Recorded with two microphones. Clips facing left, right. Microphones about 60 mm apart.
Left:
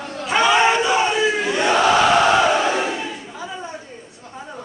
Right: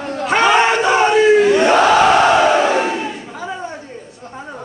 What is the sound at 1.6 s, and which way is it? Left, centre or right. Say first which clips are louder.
Crowd: right 4 dB; right.